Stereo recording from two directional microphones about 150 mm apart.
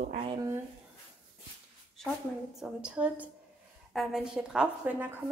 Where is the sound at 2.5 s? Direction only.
5° right (ahead or behind).